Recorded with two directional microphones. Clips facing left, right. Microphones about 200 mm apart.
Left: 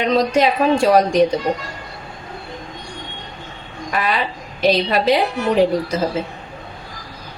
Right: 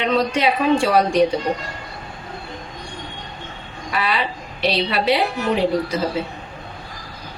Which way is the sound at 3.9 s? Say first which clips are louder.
Left 2 dB; 45° left (ahead or behind).